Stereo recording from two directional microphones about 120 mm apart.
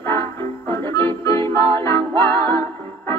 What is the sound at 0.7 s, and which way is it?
Music, 20° left (ahead or behind).